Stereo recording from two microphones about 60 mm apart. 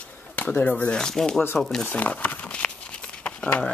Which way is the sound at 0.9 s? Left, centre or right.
Centre.